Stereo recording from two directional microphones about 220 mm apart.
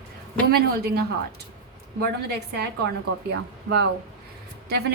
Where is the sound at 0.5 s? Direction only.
45° right (ahead or behind).